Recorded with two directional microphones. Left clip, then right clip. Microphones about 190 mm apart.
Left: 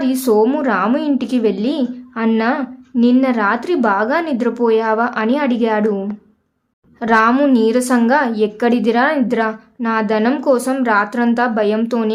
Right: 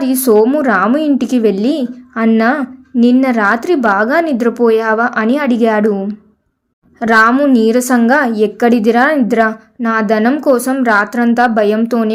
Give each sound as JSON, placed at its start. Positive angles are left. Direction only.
{"t": 0.0, "sound": "a woman's voice", "side_deg": -20}